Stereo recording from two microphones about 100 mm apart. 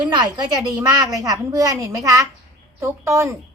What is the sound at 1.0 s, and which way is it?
A child's voice, 35° right (ahead or behind).